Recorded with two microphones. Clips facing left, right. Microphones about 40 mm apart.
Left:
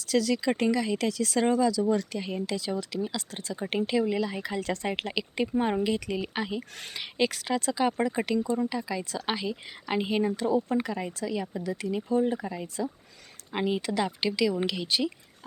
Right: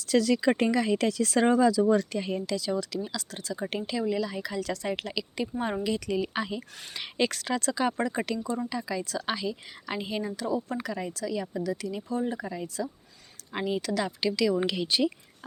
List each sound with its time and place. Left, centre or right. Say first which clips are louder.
0.1 s speech: right 2 dB; centre
1.5 s speech: right 2 dB; centre
1.9 s speech: right 3 dB; centre
2.5 s speech: right 2 dB; left
12.4 s speech: even; centre
12.6 s speech: left 1 dB; left
14.6 s speech: right 2 dB; centre